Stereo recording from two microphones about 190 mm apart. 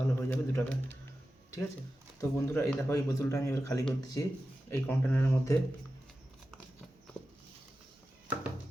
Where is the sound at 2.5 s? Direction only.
15° left (ahead or behind).